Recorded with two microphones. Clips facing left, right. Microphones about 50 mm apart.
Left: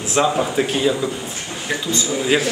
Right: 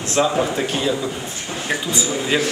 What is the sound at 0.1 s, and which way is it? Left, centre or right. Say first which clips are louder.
Speech: left 1 dB; centre.